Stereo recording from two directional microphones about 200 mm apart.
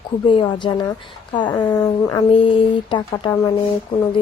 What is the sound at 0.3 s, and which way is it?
Speech, 25° left (ahead or behind).